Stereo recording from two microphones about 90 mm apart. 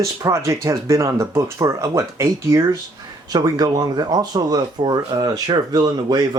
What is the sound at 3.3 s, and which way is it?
Speech, 45° right (ahead or behind).